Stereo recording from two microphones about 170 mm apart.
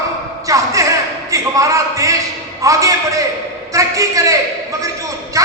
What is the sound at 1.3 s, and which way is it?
A man's voice, 20° right (ahead or behind).